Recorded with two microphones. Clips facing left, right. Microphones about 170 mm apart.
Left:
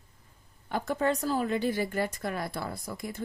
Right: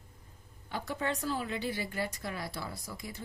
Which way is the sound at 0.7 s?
45° left (ahead or behind).